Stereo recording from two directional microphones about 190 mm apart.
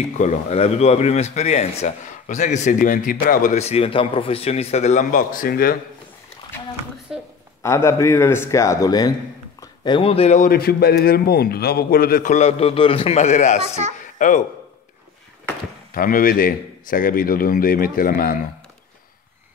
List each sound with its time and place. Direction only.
0.2 s speech: 35° left (ahead or behind)
7.6 s a man's voice: 15° left (ahead or behind); by 13.6 s 40° left (ahead or behind)
13.9 s a sound: 40° left (ahead or behind)
15.9 s speech: 45° left (ahead or behind)